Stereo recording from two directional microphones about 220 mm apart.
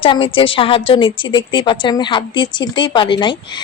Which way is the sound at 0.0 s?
25° left (ahead or behind).